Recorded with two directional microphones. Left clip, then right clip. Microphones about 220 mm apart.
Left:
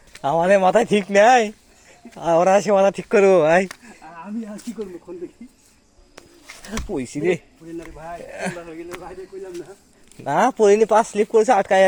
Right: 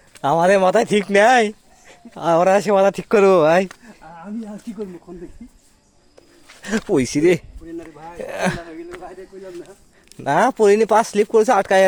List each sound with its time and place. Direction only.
0.2 s speech: 35° right (ahead or behind)
2.5 s speech: 20° right (ahead or behind)
6.7 s speech: 55° right (ahead or behind)
10.2 s speech: 35° right (ahead or behind)